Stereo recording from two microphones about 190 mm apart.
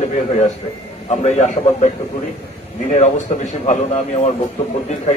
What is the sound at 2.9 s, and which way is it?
Speech, 40° left (ahead or behind).